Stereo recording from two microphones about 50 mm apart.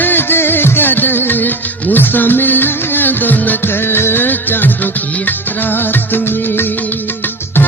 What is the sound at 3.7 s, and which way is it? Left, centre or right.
Music of bollywood, left.